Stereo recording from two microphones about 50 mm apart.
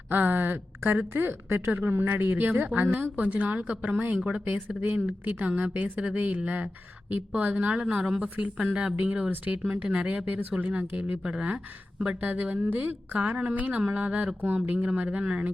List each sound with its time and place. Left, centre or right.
0.1 s a woman's voice: right; by 8.3 s centre
9.3 s a woman's voice: right
11.2 s speech: right
12.2 s a woman's voice: right
14.9 s speech: right